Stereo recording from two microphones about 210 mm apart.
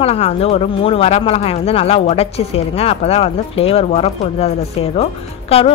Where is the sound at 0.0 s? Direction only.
30° left (ahead or behind).